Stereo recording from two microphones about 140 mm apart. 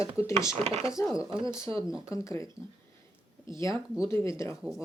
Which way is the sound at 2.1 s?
20° left (ahead or behind).